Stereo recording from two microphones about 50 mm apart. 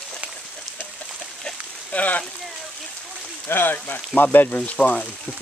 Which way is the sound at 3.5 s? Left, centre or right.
Left.